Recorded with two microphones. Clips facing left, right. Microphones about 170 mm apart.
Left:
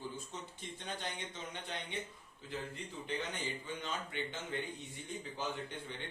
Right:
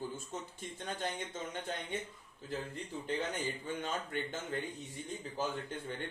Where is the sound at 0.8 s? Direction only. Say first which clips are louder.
Right 4 dB; 45° right (ahead or behind).